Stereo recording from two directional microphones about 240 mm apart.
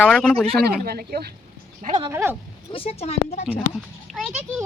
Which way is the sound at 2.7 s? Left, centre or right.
Left.